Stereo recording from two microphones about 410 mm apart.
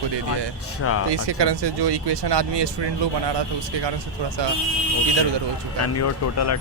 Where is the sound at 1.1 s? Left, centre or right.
Right.